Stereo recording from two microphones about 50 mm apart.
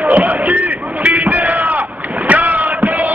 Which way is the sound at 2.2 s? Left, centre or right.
Right.